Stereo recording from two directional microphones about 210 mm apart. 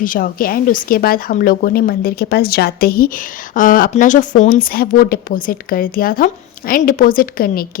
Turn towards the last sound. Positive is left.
turn(degrees=45)  # may be behind; listen again after turning